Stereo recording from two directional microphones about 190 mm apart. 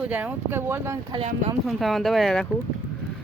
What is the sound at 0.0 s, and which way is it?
Speech, 10° right (ahead or behind).